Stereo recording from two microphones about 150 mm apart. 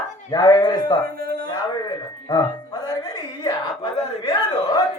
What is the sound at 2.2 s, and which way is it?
Music, 25° left (ahead or behind).